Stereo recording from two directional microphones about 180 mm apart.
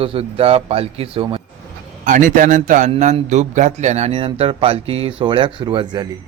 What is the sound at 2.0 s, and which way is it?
A man's voice, 45° right (ahead or behind).